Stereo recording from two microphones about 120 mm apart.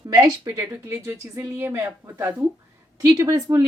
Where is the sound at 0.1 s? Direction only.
30° right (ahead or behind).